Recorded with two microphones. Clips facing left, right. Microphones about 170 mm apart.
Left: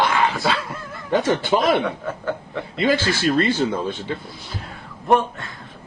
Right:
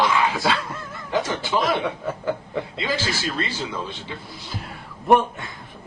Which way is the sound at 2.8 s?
60° left (ahead or behind).